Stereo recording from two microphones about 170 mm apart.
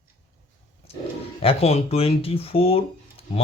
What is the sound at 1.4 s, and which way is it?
Speech, 35° left (ahead or behind).